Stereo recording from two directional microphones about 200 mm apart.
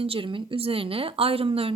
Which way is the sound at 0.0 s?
25° right (ahead or behind).